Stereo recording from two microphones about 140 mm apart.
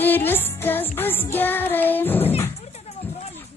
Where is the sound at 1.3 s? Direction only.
15° left (ahead or behind).